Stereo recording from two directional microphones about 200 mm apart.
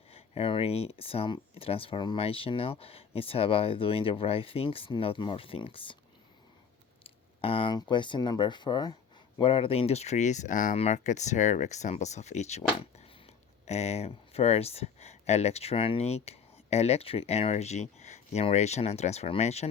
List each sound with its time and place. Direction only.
0.1 s speech: 30° left (ahead or behind)
7.0 s speech: 25° left (ahead or behind)
13.7 s speech: 30° left (ahead or behind)